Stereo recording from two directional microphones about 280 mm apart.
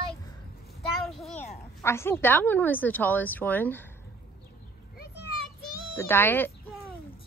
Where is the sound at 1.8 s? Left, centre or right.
Centre.